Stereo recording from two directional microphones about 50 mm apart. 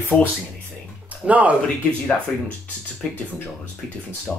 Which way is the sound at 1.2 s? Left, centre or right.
Right.